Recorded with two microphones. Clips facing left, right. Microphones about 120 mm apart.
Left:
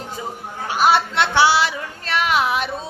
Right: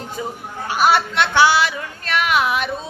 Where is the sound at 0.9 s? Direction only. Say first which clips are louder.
Even; 25° left (ahead or behind).